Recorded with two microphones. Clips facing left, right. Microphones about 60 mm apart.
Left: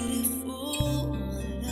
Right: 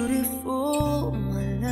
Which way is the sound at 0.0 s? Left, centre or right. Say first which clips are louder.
Right 5 dB; right.